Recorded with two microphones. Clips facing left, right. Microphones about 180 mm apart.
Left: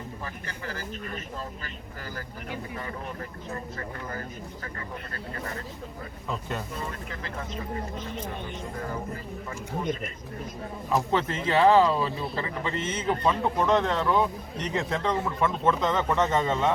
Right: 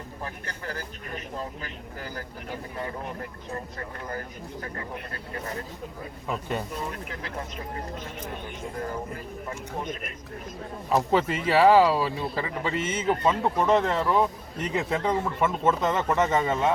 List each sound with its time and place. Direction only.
1.1 s speech: 15° right (ahead or behind)
10.9 s speech: 10° right (ahead or behind)